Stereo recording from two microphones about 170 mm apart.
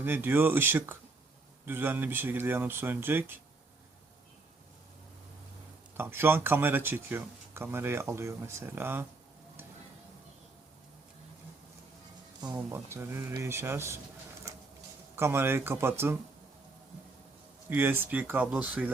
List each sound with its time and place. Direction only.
0.0 s speech: 10° right (ahead or behind)
6.0 s speech: 15° right (ahead or behind)
12.4 s speech: 15° right (ahead or behind)
15.1 s speech: 15° right (ahead or behind)
17.7 s speech: 10° right (ahead or behind)